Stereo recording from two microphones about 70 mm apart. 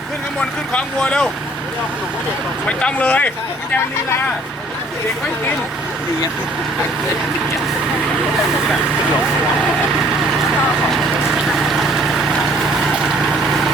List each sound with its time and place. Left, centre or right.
0.7 s speech: centre
2.6 s speech: centre
11.7 s vehicle: centre